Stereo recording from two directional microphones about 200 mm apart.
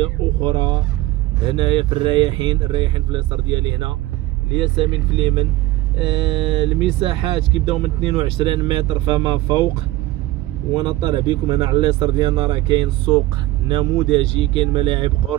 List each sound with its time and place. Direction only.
0.0 s speech: 25° right (ahead or behind)
10.7 s speech: 20° right (ahead or behind)